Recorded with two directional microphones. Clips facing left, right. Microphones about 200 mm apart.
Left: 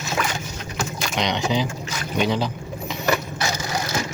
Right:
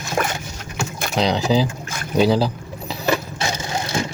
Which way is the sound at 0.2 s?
50° right (ahead or behind).